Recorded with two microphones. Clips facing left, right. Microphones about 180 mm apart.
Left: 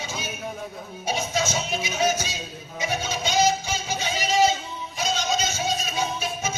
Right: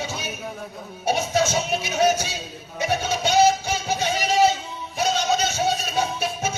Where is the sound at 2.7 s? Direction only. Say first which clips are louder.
Right 4 dB; 65° right (ahead or behind).